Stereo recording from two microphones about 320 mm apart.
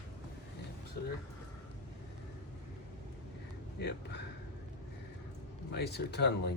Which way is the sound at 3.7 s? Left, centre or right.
Left.